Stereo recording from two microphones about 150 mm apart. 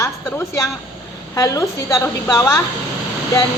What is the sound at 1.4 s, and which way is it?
A woman's voice, 20° left (ahead or behind).